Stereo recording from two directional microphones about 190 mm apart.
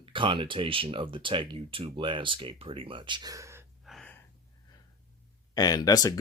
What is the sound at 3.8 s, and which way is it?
Gasp, centre (ahead or behind).